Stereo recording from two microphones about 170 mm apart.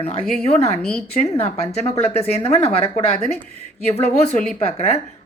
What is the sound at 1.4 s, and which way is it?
A woman's voice, 40° left (ahead or behind).